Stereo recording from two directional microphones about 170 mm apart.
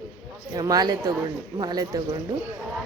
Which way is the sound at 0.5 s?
20° right (ahead or behind).